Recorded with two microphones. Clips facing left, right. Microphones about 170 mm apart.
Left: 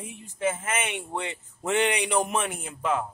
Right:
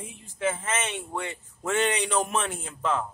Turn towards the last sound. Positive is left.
turn(degrees=10)  # may be behind; listen again after turning